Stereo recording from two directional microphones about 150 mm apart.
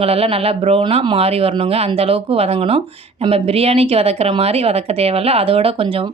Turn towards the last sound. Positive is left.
turn(degrees=-40)  # may be behind; listen again after turning